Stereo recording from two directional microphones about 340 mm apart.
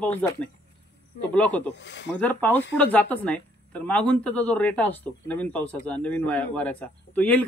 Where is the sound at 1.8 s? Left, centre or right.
Left.